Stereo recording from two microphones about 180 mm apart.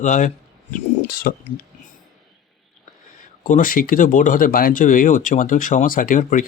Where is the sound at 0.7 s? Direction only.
55° left (ahead or behind).